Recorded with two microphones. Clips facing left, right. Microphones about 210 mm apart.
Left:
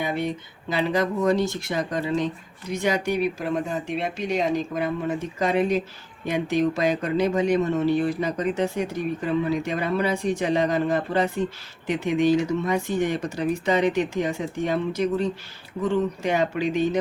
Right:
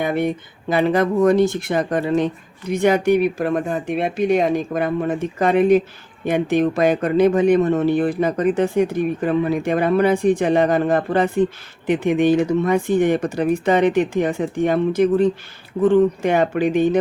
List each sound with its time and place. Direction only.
0.0 s speech: 55° right (ahead or behind)